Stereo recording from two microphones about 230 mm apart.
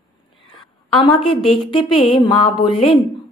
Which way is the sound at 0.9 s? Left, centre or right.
Left.